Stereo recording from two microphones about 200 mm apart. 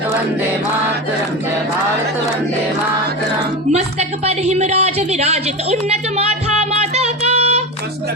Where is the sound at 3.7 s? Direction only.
30° right (ahead or behind).